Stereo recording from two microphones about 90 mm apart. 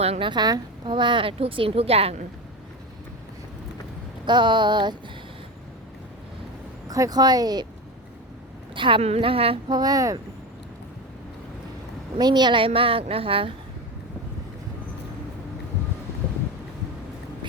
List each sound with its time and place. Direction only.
0.2 s a woman's voice: 55° right (ahead or behind); by 2.1 s 90° right
4.3 s a sound: 60° right (ahead or behind)
6.8 s speech: 45° right (ahead or behind)
8.7 s a woman's voice: 70° right (ahead or behind); by 9.6 s 90° right
9.6 s speech: 50° right (ahead or behind)
12.2 s a woman's voice: 55° right (ahead or behind); by 13.5 s 90° right